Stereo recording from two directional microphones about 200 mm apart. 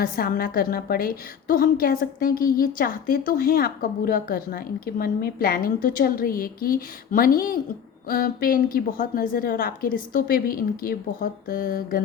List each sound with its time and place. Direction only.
0.0 s a woman's voice: 45° left (ahead or behind)